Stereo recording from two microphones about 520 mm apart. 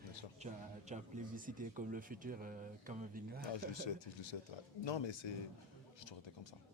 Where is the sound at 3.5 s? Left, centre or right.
Left.